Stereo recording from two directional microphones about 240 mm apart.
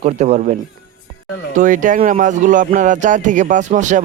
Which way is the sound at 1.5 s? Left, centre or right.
Right.